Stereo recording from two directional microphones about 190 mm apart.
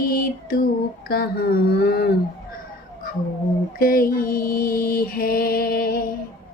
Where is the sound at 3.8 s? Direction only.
50° left (ahead or behind).